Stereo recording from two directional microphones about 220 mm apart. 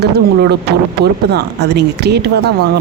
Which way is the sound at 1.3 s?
50° right (ahead or behind).